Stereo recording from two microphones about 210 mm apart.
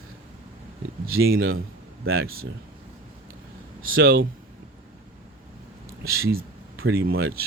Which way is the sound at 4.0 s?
65° right (ahead or behind).